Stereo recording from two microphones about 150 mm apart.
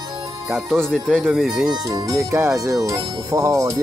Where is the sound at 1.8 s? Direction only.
25° right (ahead or behind).